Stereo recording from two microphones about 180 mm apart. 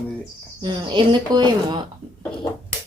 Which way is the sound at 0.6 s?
25° right (ahead or behind).